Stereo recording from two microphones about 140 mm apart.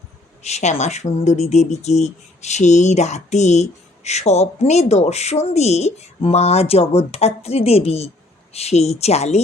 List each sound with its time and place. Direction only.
0.4 s speech: 50° left (ahead or behind)